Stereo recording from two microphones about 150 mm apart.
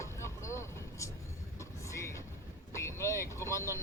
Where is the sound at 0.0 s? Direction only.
20° left (ahead or behind).